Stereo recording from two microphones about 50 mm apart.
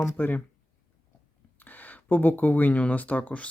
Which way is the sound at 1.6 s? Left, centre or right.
Left.